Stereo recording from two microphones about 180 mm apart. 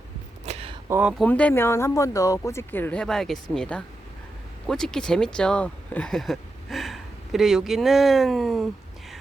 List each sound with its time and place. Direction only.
0.4 s a sound: 35° right (ahead or behind)
0.9 s speech: 10° right (ahead or behind)
1.2 s speech: 5° left (ahead or behind)